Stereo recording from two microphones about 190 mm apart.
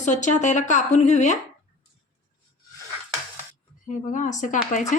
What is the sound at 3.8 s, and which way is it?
Speech, 40° left (ahead or behind).